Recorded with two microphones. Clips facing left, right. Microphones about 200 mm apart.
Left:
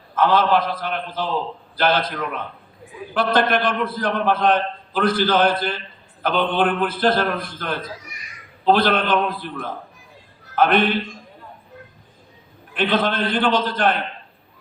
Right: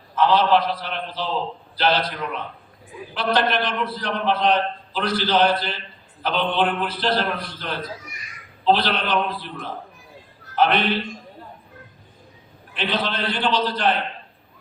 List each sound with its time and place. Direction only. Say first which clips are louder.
0.2 s a man's voice: even; 50° left (ahead or behind)
3.2 s a man's voice: left 3 dB; 50° left (ahead or behind)
12.7 s a man's voice: left 5 dB; 50° left (ahead or behind)